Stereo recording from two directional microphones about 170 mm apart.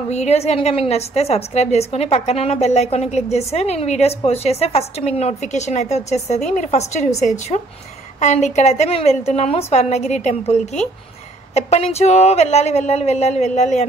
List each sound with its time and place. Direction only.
0.1 s a woman's voice: 40° left (ahead or behind)